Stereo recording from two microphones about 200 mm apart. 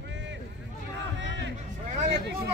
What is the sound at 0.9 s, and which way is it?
Crowd, 60° right (ahead or behind).